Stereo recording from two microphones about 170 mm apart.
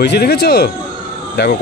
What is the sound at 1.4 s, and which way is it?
Speech, 90° left.